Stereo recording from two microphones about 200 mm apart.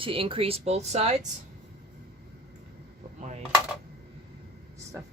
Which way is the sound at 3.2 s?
35° right (ahead or behind).